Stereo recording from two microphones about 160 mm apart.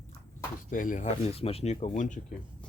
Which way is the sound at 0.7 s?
55° left (ahead or behind).